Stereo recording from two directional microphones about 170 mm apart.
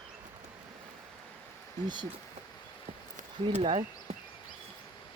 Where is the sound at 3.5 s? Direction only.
35° right (ahead or behind).